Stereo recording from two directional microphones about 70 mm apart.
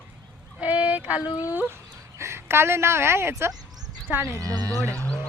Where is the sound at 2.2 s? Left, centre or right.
Right.